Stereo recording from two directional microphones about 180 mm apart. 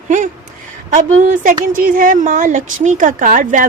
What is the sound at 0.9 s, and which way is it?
A woman's voice, 45° right (ahead or behind).